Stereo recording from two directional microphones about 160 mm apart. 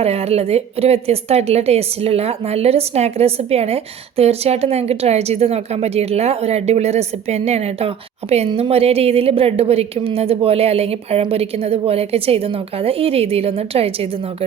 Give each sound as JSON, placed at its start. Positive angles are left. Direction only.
{"t": 0.0, "sound": "a woman's voice", "side_deg": -40}